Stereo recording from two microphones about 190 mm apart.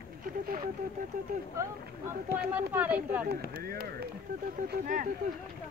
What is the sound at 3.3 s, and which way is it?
Speech, 55° right (ahead or behind).